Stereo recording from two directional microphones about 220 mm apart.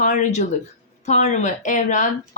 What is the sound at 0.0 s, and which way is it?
Speech, 35° left (ahead or behind).